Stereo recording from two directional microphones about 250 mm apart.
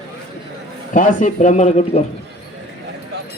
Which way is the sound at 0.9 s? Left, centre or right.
Left.